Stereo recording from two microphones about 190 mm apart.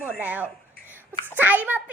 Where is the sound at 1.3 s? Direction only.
10° right (ahead or behind).